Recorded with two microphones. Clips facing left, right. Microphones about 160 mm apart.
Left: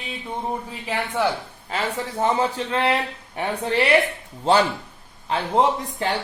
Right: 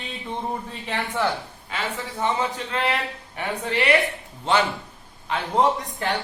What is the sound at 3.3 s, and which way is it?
Speech, 35° left (ahead or behind).